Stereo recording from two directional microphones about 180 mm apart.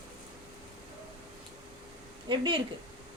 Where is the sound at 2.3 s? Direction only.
25° right (ahead or behind).